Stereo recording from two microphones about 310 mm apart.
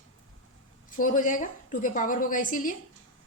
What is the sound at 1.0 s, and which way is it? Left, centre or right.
A woman's voice, left.